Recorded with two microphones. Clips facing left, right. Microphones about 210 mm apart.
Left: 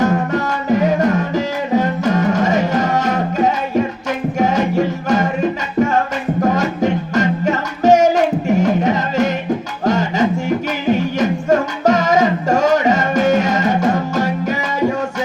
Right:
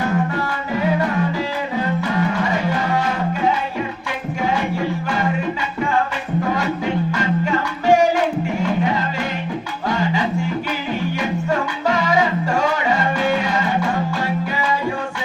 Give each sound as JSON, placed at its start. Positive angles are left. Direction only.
{"t": 0.0, "sound": "music", "side_deg": 40}